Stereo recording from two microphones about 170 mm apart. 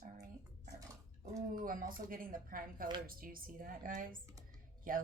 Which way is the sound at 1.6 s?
55° right (ahead or behind).